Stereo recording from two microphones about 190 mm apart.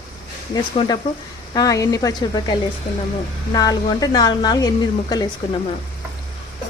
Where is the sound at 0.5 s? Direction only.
20° left (ahead or behind).